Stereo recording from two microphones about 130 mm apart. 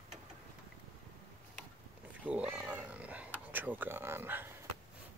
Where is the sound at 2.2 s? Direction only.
10° right (ahead or behind).